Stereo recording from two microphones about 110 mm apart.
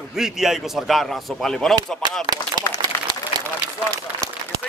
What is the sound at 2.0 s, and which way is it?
Speech, 45° right (ahead or behind).